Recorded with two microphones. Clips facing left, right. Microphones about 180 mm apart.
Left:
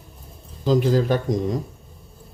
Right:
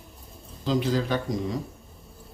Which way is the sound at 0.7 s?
45° left (ahead or behind).